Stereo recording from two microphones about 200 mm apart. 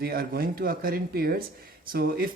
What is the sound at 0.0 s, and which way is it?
Speech, 50° right (ahead or behind).